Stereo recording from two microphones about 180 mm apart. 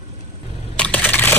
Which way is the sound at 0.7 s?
5° left (ahead or behind).